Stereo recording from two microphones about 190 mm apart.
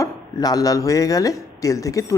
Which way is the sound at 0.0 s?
20° left (ahead or behind).